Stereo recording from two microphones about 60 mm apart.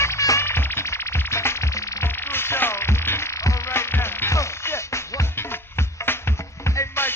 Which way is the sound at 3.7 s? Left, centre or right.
Left.